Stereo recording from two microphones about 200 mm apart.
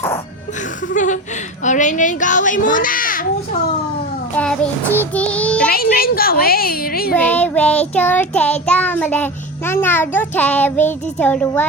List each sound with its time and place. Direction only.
0.9 s a child's voice: 40° left (ahead or behind)
4.4 s child singing: 5° left (ahead or behind)
5.7 s a woman's voice: 50° left (ahead or behind)
7.1 s child singing: 5° left (ahead or behind)